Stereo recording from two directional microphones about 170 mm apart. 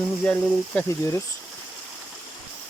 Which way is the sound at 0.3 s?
10° left (ahead or behind).